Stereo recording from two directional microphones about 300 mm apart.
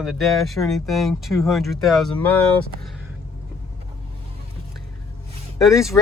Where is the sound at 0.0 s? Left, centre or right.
Centre.